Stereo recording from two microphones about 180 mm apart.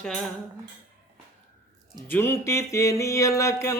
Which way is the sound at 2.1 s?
15° left (ahead or behind).